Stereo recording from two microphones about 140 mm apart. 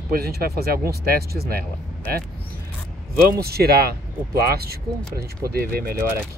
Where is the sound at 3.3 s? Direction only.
90° right.